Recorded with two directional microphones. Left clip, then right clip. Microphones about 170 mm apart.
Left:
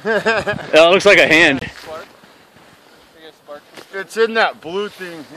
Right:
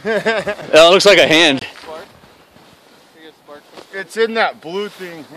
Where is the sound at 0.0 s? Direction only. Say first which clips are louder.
Left 1 dB; 10° right (ahead or behind).